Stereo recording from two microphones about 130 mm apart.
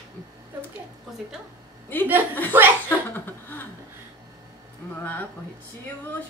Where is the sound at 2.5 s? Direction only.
15° right (ahead or behind).